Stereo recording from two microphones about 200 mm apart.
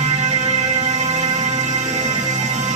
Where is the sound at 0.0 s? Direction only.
35° right (ahead or behind).